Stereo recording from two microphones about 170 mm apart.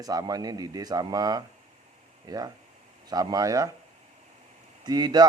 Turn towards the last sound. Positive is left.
turn(degrees=-25)  # may be behind; listen again after turning